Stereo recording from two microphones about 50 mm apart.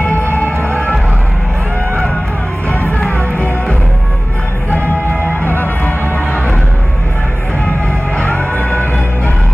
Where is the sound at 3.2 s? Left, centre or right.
Left.